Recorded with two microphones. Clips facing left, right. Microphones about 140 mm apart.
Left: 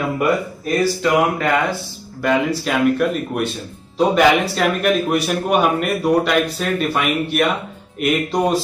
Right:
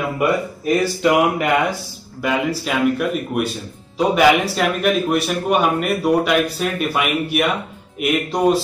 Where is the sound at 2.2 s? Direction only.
5° right (ahead or behind).